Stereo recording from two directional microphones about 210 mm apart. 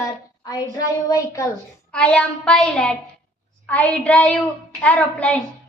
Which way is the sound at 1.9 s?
5° left (ahead or behind).